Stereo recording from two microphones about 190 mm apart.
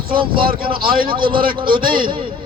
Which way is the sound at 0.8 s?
50° right (ahead or behind).